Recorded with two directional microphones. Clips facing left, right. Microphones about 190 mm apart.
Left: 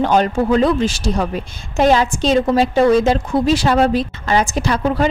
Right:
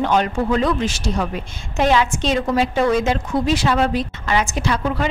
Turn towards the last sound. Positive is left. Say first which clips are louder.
# left 4 dB
turn(degrees=40)  # may be behind; listen again after turning